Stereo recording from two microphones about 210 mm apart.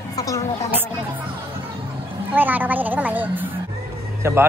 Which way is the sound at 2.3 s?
10° right (ahead or behind).